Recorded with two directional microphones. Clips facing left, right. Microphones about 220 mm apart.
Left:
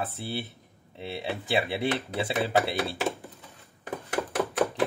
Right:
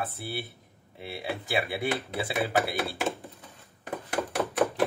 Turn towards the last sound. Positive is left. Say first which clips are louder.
# left 1 dB
turn(degrees=0)  # may be behind; listen again after turning